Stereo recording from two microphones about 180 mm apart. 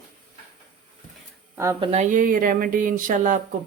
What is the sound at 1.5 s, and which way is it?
Speech, 15° right (ahead or behind).